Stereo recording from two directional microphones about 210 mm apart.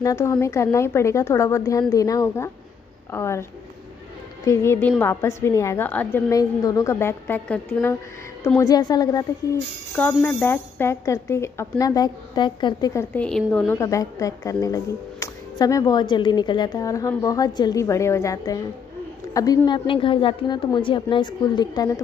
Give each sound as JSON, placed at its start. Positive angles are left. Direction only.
{"t": 0.0, "sound": "speech", "side_deg": 15}
{"t": 4.5, "sound": "a woman's voice", "side_deg": 10}